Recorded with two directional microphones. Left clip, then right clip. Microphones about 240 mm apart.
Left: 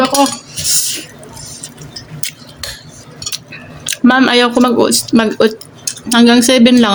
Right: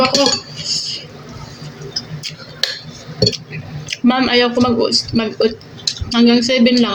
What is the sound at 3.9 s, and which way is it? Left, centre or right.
Speech, left.